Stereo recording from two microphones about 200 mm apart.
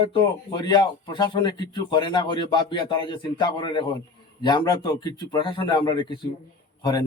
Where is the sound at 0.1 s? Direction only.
20° left (ahead or behind).